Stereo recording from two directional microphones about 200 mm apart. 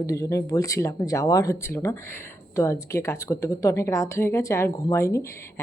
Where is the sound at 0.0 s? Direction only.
15° left (ahead or behind).